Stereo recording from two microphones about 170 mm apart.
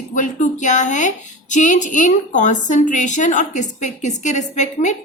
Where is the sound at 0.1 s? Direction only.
50° left (ahead or behind).